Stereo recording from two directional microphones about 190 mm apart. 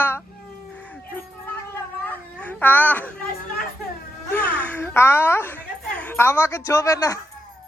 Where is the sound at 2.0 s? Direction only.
5° left (ahead or behind).